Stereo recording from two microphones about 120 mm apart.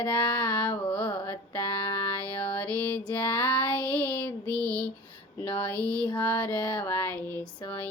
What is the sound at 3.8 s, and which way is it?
Child singing, 10° left (ahead or behind).